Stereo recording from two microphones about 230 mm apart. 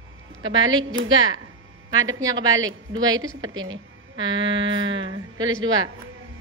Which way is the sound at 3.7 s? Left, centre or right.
Centre.